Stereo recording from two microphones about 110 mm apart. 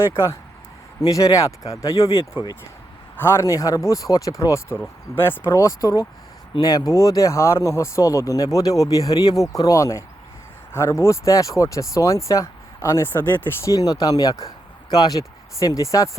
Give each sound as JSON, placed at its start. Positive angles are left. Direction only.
{"t": 0.1, "sound": "speech", "side_deg": 25}
{"t": 2.0, "sound": "speech", "side_deg": 55}
{"t": 3.2, "sound": "speech", "side_deg": 20}